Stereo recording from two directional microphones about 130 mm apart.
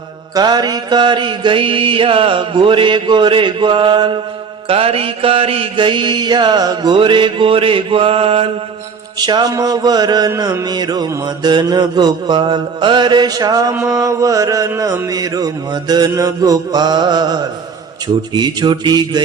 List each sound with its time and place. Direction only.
0.3 s mantra: 30° right (ahead or behind)
9.1 s mantra: 30° right (ahead or behind)